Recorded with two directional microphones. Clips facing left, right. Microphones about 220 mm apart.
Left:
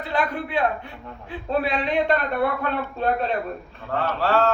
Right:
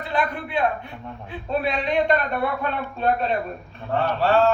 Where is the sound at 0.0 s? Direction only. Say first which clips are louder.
Even; 20° right (ahead or behind).